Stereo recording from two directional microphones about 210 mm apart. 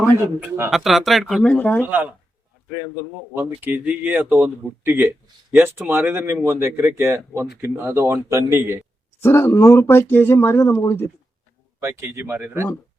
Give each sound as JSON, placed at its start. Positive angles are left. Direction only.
{"t": 0.0, "sound": "a man's voice", "side_deg": -5}
{"t": 1.8, "sound": "a man's voice", "side_deg": -10}
{"t": 3.6, "sound": "a man's voice", "side_deg": -5}
{"t": 9.2, "sound": "speech", "side_deg": 10}
{"t": 11.8, "sound": "a man's voice", "side_deg": -10}